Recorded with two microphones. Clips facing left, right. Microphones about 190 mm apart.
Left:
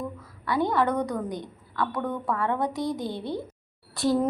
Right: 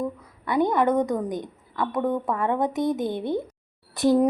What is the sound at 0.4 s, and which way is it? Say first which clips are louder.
A woman's voice: right 3 dB; 20° right (ahead or behind).